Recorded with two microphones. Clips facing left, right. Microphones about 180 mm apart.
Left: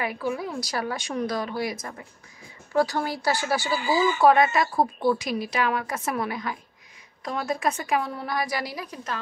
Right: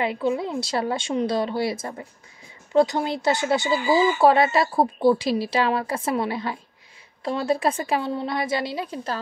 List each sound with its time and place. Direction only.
0.0 s speech: 25° right (ahead or behind)